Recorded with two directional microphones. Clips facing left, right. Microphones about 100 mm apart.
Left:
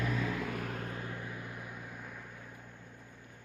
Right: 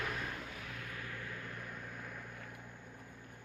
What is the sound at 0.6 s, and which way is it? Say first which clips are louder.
Vehicle: left 8 dB; 45° left (ahead or behind).